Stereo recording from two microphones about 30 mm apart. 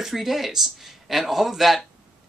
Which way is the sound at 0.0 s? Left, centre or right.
Centre.